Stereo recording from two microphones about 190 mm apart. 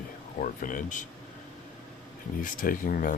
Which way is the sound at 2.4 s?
45° left (ahead or behind).